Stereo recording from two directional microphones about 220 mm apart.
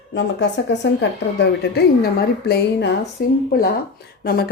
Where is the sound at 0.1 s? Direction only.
55° left (ahead or behind).